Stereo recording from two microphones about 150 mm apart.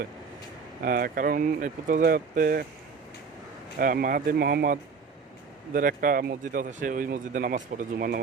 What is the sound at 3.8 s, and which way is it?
Speech, 75° right (ahead or behind).